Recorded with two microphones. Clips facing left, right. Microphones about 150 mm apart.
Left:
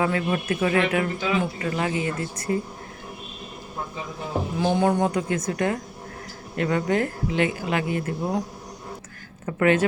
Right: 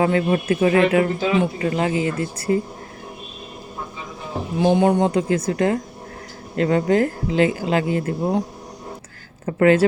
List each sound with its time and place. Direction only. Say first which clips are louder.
0.0 s speech: right 5 dB; 30° right (ahead or behind)
4.5 s speech: right 5 dB; 20° right (ahead or behind)
9.5 s speech: right 5 dB; 35° right (ahead or behind)